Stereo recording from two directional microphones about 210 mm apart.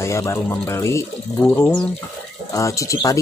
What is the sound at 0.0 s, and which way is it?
Speech, 15° left (ahead or behind).